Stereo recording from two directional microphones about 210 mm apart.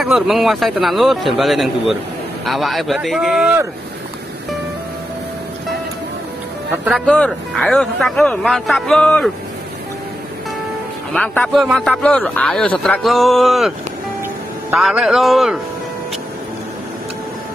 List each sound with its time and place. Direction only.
0.0 s a man's voice: centre (ahead or behind)
7.1 s a man's voice: 5° left (ahead or behind)
11.1 s a man's voice: 5° left (ahead or behind)